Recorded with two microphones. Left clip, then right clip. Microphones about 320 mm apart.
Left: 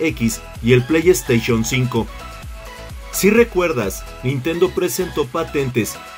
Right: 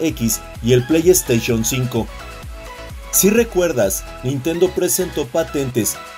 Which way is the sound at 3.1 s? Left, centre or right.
Centre.